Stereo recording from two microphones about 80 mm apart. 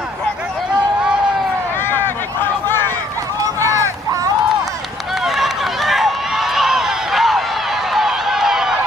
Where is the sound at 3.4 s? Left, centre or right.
Right.